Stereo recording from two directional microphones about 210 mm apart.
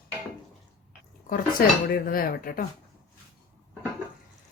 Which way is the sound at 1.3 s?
45° left (ahead or behind).